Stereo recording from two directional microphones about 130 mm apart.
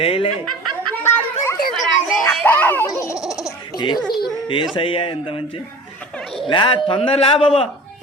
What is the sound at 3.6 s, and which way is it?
Baby laughter, 35° left (ahead or behind).